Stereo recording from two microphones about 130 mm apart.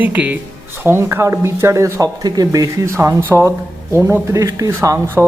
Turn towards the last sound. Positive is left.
turn(degrees=-25)  # may be behind; listen again after turning